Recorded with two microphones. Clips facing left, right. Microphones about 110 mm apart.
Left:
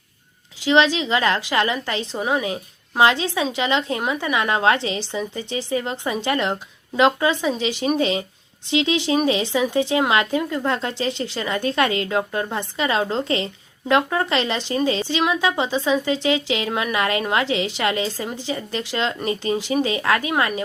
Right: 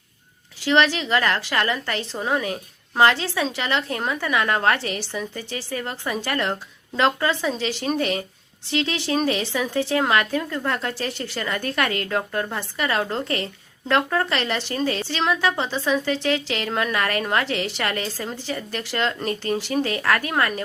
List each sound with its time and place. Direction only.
0.6 s speech: 15° left (ahead or behind)